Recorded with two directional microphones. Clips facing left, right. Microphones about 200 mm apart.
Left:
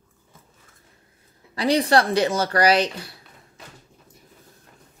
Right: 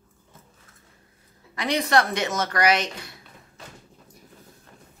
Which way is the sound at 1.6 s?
35° left (ahead or behind).